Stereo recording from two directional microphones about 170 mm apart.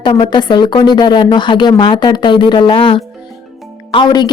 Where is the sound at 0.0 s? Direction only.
25° left (ahead or behind).